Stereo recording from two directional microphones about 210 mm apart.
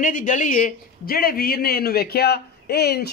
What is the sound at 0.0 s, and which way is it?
A man's voice, 40° left (ahead or behind).